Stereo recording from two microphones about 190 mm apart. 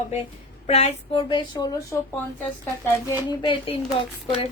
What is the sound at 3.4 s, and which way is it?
A woman's voice, 25° left (ahead or behind).